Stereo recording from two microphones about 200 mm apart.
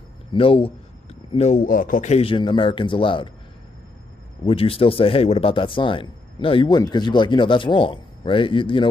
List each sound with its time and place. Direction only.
0.3 s speech: 25° left (ahead or behind)
4.5 s speech: 30° left (ahead or behind)